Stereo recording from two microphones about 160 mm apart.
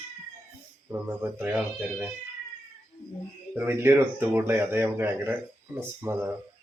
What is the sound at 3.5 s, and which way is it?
A man's voice, 10° right (ahead or behind).